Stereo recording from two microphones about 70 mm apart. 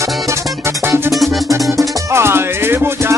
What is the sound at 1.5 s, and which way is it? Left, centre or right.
Music, right.